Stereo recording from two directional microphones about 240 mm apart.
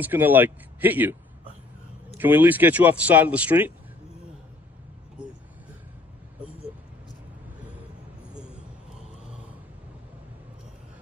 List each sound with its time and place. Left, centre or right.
0.0 s a man's voice: centre
2.1 s a man's voice: centre